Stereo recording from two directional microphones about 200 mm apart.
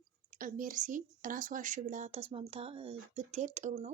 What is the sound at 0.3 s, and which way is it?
Speech, 40° right (ahead or behind).